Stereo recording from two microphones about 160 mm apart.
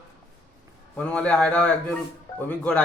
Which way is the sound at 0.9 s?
5° left (ahead or behind).